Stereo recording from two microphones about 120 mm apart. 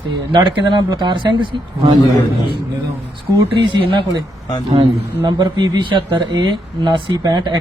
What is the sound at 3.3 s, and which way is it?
Speech, 40° right (ahead or behind).